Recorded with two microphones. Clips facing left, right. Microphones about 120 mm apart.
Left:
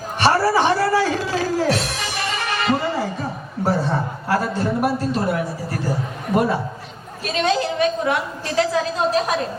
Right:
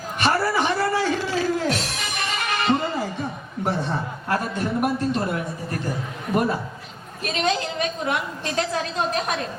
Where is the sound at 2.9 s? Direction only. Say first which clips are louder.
Left 3 dB; 35° left (ahead or behind).